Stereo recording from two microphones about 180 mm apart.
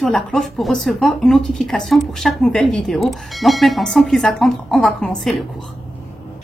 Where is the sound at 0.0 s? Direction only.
Centre (ahead or behind).